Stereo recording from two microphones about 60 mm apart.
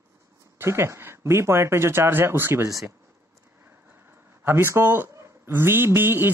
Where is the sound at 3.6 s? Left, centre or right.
Right.